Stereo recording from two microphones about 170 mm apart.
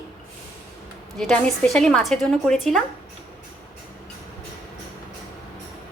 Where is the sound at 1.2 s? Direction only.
Centre (ahead or behind).